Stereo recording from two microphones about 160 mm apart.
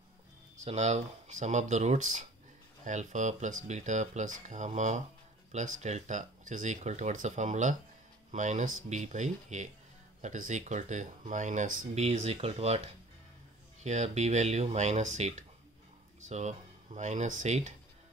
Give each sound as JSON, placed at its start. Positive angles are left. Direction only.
{"t": 0.7, "sound": "speech", "side_deg": -40}